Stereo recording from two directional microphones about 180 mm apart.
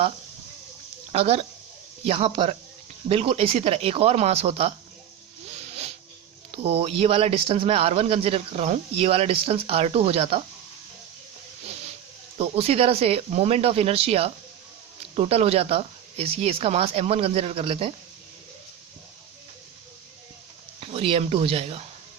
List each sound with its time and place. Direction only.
1.1 s speech: 35° right (ahead or behind)
5.5 s a sound: 35° right (ahead or behind)
6.5 s speech: 35° right (ahead or behind)
12.4 s speech: 35° right (ahead or behind)
20.8 s speech: 35° right (ahead or behind)